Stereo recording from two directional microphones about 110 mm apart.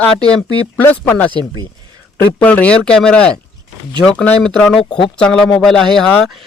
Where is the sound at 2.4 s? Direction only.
10° left (ahead or behind).